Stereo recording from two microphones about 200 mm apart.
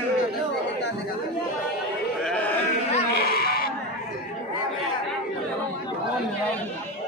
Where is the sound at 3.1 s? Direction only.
50° left (ahead or behind).